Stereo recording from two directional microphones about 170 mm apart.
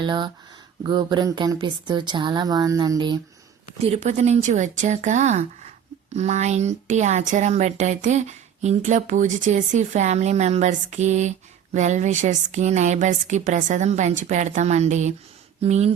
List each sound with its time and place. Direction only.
0.0 s speech: 25° right (ahead or behind)
3.8 s speech: 35° right (ahead or behind)